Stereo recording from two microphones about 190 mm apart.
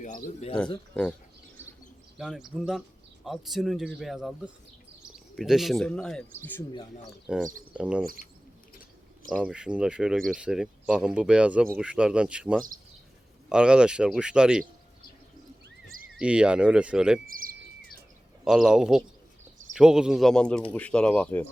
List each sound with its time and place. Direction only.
0.0 s speech: 40° left (ahead or behind)
2.1 s speech: centre (ahead or behind)
7.3 s speech: 5° right (ahead or behind)
9.3 s speech: 5° right (ahead or behind)
16.1 s speech: 5° right (ahead or behind)
17.2 s speech: 50° right (ahead or behind)
18.4 s speech: centre (ahead or behind)